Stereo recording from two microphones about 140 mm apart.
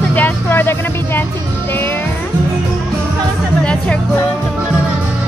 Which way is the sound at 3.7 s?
10° left (ahead or behind).